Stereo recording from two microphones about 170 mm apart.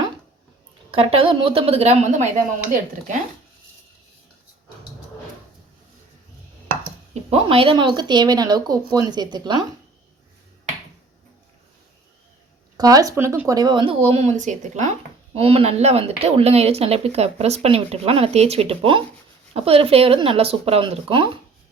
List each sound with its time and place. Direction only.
0.9 s speech: 30° right (ahead or behind)
7.1 s speech: 35° right (ahead or behind)
12.7 s speech: 20° right (ahead or behind); by 14.8 s 45° right (ahead or behind)
15.4 s speech: 35° right (ahead or behind)